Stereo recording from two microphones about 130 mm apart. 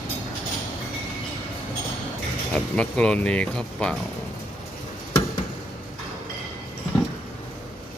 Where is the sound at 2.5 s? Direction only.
10° left (ahead or behind).